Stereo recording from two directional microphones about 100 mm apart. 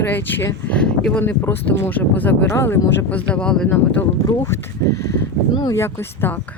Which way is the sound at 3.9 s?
25° left (ahead or behind).